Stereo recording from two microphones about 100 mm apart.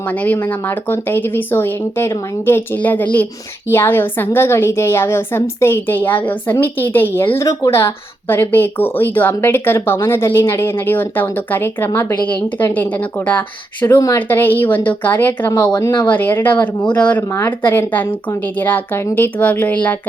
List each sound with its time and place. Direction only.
0.2 s speech: 15° left (ahead or behind)
7.3 s speech: 30° left (ahead or behind); by 20.0 s 15° left (ahead or behind)